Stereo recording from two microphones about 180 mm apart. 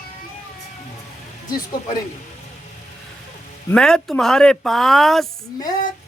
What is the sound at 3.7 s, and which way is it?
Speech, 5° left (ahead or behind).